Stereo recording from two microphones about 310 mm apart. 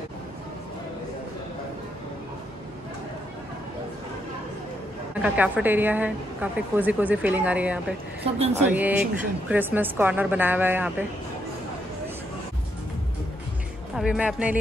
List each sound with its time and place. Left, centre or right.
5.2 s a woman's voice: centre
8.3 s speech: centre
8.6 s a woman's voice: centre
13.9 s a woman's voice: centre